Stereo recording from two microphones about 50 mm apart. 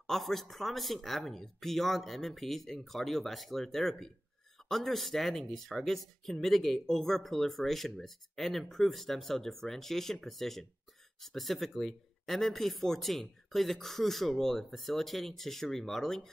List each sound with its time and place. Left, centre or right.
0.0 s speech: centre